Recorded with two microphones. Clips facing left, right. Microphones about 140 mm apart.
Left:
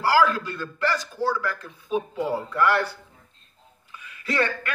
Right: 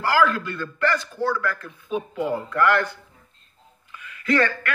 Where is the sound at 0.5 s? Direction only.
10° left (ahead or behind).